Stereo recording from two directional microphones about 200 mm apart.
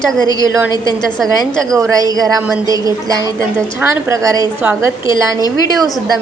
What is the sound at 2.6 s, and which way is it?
A woman's voice, 20° right (ahead or behind).